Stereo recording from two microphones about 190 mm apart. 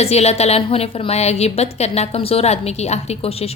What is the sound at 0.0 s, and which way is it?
A woman's voice, 35° left (ahead or behind).